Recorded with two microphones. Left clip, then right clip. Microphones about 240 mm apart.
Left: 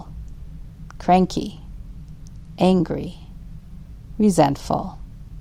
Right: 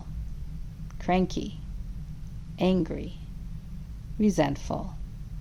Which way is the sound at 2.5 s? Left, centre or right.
Left.